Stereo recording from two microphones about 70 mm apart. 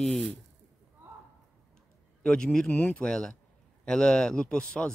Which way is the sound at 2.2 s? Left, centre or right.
Centre.